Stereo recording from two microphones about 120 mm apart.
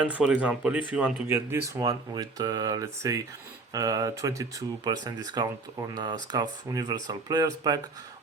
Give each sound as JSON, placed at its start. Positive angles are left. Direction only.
{"t": 0.0, "sound": "speech", "side_deg": -10}